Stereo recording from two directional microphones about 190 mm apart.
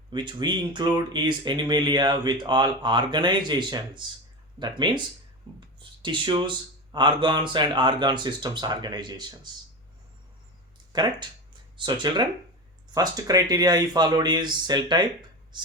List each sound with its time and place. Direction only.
0.1 s speech: 25° right (ahead or behind)
10.9 s speech: 20° right (ahead or behind)
15.5 s a sound: 25° right (ahead or behind)